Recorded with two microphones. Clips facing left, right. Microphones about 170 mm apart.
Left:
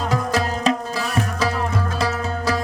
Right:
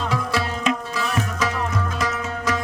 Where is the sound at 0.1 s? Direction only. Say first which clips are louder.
Left 3 dB; 40° left (ahead or behind).